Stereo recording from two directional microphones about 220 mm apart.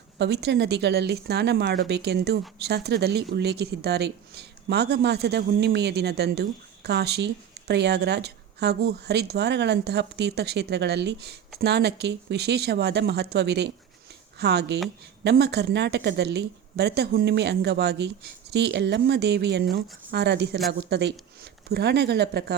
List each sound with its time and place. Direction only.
0.2 s speech: 50° right (ahead or behind)